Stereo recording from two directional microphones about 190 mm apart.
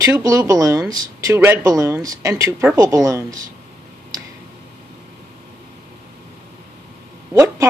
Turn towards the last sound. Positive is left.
turn(degrees=-15)  # may be behind; listen again after turning